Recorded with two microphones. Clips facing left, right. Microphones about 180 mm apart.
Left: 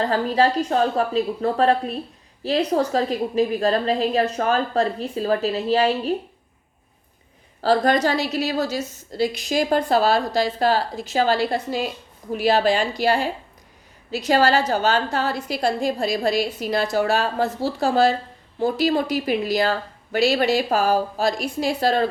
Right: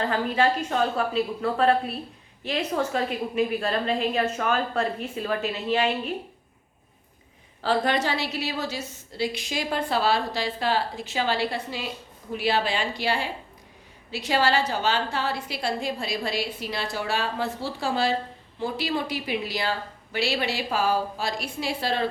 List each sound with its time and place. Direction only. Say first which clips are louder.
0.0 s a woman's voice: left 4 dB; 35° left (ahead or behind)
7.6 s a woman's voice: left 6 dB; 40° left (ahead or behind)